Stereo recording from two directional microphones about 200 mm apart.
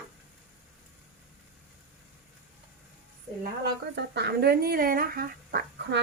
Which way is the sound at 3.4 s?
55° right (ahead or behind).